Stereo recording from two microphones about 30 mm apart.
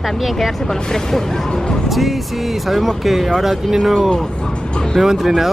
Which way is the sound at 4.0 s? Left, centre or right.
Centre.